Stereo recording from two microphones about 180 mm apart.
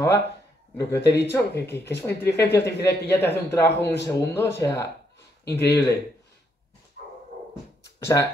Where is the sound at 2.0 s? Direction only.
10° left (ahead or behind).